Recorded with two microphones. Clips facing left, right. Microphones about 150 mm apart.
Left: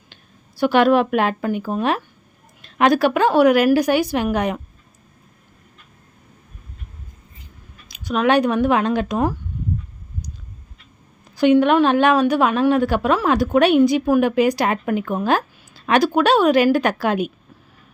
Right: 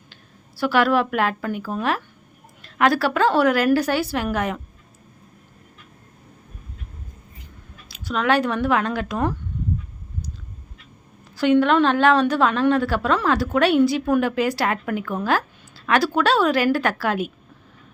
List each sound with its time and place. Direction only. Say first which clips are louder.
0.1 s a woman's voice: right 1 dB; 20° left (ahead or behind)
7.9 s a woman's voice: left 3 dB; 15° left (ahead or behind)
11.3 s a woman's voice: left 3 dB; 15° left (ahead or behind)